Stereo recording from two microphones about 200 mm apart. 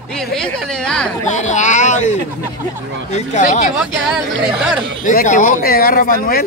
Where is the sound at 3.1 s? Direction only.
35° left (ahead or behind).